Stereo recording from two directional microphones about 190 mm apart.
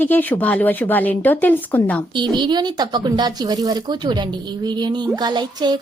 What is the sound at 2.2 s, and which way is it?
Speech, 25° right (ahead or behind).